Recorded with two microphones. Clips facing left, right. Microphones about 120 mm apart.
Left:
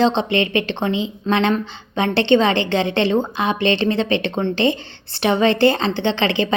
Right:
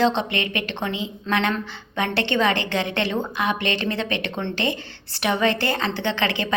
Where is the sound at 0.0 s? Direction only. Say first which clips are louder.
Left 4 dB; 25° left (ahead or behind).